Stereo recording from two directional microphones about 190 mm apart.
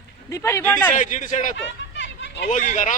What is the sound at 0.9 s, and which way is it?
Speech, 40° left (ahead or behind).